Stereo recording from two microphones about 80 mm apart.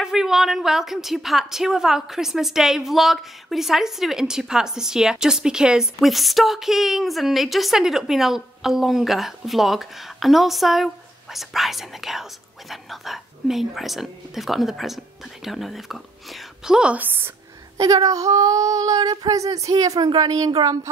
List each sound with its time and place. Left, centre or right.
0.0 s a woman's voice: centre
17.7 s child singing: right